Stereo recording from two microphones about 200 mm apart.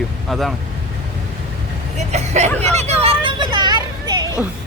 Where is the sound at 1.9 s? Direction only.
35° right (ahead or behind).